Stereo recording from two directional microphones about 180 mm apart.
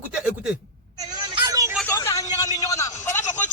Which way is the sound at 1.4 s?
20° right (ahead or behind).